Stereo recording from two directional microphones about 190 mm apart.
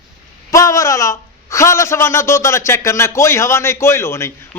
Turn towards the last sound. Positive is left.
turn(degrees=15)  # may be behind; listen again after turning